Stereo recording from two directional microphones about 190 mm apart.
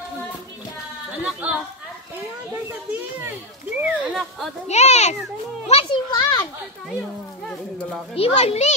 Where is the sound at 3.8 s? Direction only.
5° right (ahead or behind).